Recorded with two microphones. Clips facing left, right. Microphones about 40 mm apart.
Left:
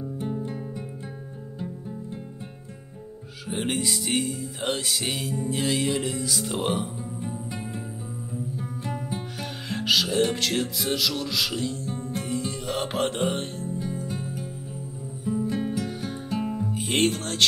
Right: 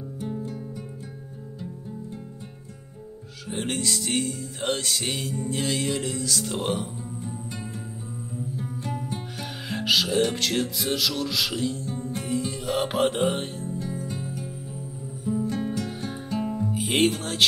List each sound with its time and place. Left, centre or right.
0.2 s music: left
3.4 s music: centre
7.2 s music: left
8.4 s music: centre
15.9 s music: centre
16.3 s music: centre